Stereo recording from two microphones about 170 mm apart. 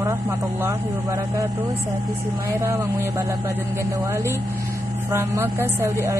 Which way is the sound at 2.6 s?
15° right (ahead or behind).